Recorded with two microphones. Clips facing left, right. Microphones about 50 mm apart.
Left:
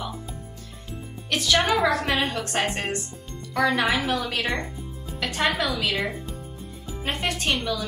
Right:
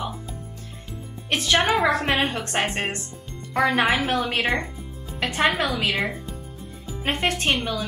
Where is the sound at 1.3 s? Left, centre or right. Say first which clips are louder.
Right 1 dB; right.